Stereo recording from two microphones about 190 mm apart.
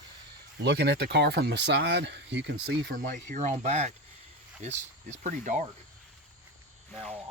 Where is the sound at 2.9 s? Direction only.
45° right (ahead or behind).